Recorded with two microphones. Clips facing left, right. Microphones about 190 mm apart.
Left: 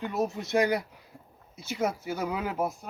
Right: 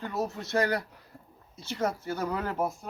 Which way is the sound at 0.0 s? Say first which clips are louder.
Left 3 dB; 20° left (ahead or behind).